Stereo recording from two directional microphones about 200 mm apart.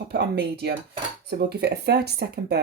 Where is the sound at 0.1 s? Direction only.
55° right (ahead or behind).